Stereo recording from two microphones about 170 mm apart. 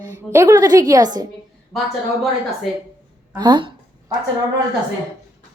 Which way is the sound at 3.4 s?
25° right (ahead or behind).